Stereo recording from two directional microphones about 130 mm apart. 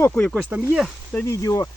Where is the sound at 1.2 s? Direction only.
25° left (ahead or behind).